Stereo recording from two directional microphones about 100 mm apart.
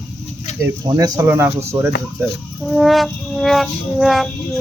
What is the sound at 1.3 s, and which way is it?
Speech, 20° right (ahead or behind).